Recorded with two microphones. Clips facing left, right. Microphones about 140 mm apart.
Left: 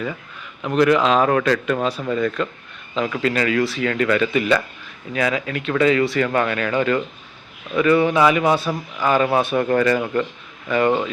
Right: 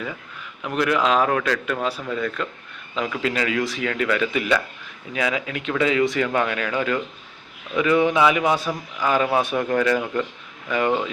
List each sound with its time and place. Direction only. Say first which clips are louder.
0.6 s speech: left 5 dB; 5° right (ahead or behind)